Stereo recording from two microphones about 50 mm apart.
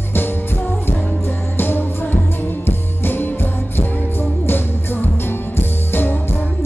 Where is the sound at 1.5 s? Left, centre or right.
Left.